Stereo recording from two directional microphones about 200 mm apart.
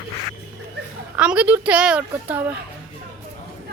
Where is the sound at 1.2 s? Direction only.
5° right (ahead or behind).